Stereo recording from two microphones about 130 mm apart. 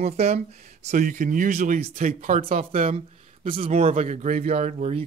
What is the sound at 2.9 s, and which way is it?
Speech, 45° right (ahead or behind).